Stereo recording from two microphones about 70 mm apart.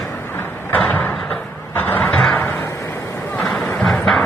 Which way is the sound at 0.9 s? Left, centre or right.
Left.